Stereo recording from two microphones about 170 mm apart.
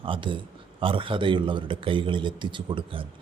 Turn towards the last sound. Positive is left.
turn(degrees=-30)  # may be behind; listen again after turning